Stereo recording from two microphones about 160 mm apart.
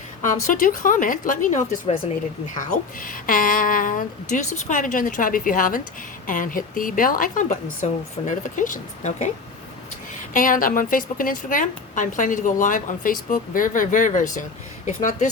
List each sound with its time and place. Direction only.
0.4 s a woman's voice: 55° left (ahead or behind)
10.3 s a woman's voice: 55° left (ahead or behind)